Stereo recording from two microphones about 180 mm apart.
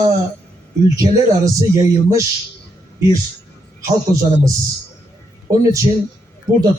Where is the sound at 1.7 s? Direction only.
15° right (ahead or behind).